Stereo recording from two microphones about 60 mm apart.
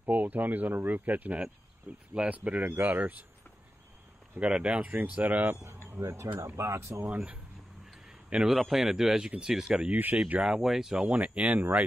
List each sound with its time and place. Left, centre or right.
0.0 s speech: right
4.4 s speech: centre
5.6 s speech: right
6.4 s speech: right
7.1 s speech: right
8.5 s speech: centre
9.7 s speech: right
10.5 s speech: centre
11.1 s speech: right